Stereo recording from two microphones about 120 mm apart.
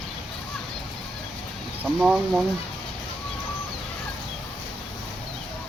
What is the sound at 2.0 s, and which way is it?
Speech, 5° right (ahead or behind).